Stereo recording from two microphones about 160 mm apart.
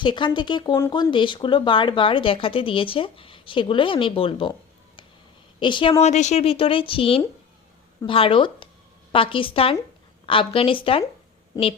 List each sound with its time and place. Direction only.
0.0 s speech: 30° left (ahead or behind)
5.5 s speech: 30° left (ahead or behind)